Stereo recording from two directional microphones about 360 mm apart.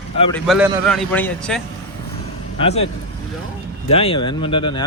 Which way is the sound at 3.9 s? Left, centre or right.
Centre.